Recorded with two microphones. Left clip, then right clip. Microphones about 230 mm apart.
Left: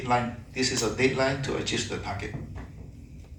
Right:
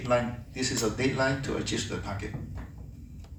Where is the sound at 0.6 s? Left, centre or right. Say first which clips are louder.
Left 4 dB; centre.